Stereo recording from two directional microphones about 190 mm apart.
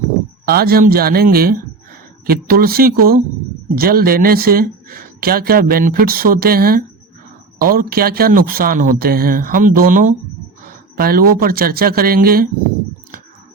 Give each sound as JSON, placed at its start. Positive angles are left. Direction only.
{"t": 0.4, "sound": "speech", "side_deg": -55}